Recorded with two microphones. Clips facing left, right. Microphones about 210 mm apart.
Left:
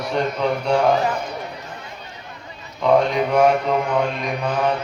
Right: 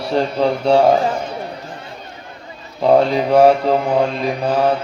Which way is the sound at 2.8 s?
35° right (ahead or behind).